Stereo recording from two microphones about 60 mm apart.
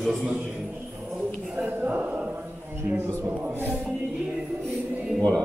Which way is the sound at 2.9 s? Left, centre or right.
Right.